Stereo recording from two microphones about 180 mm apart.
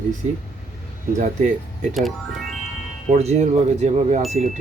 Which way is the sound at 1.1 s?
45° right (ahead or behind).